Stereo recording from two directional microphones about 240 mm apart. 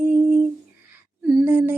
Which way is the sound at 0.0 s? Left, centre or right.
Centre.